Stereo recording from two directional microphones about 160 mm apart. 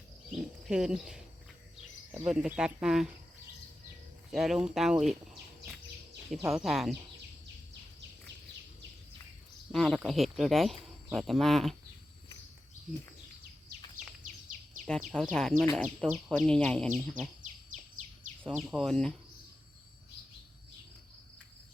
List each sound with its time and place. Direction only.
0.3 s speech: 5° right (ahead or behind)
4.3 s speech: centre (ahead or behind)
6.5 s speech: centre (ahead or behind)
9.7 s speech: centre (ahead or behind)
12.9 s speech: 55° right (ahead or behind)
14.8 s speech: 5° left (ahead or behind)
18.4 s speech: centre (ahead or behind)